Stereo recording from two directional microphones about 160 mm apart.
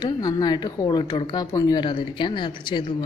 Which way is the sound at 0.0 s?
25° left (ahead or behind).